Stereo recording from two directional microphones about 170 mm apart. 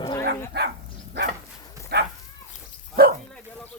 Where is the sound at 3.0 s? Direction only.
60° right (ahead or behind).